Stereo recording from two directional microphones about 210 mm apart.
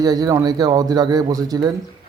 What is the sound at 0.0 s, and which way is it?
Speech, 20° right (ahead or behind).